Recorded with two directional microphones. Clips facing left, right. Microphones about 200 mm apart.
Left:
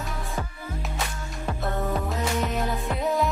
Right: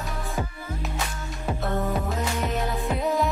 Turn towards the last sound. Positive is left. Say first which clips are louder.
# right 1 dB
turn(degrees=0)  # may be behind; listen again after turning